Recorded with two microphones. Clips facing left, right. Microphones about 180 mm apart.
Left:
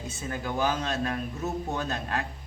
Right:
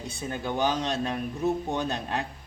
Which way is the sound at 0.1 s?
30° right (ahead or behind).